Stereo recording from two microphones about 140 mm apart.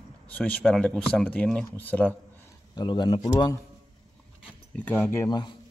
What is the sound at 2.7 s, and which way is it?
Speech, 30° left (ahead or behind).